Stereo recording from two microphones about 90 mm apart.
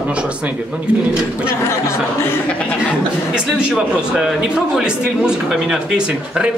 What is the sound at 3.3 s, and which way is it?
A man's voice, 10° right (ahead or behind).